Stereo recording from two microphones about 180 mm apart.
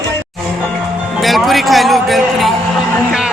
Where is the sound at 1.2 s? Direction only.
Centre (ahead or behind).